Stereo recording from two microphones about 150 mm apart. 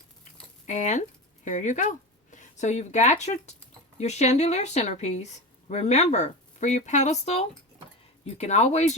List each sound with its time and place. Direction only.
0.7 s speech: 55° left (ahead or behind)